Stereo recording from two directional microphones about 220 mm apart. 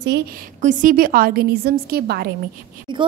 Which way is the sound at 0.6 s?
35° right (ahead or behind).